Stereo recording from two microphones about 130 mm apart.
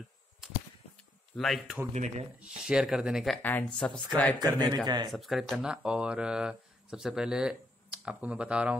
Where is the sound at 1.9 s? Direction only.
60° right (ahead or behind).